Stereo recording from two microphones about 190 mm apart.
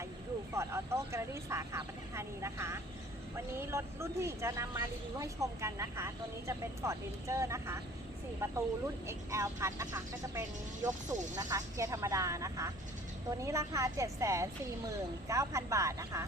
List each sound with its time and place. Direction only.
0.5 s speech: 15° right (ahead or behind)